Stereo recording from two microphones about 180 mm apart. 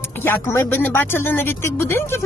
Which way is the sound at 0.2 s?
15° left (ahead or behind).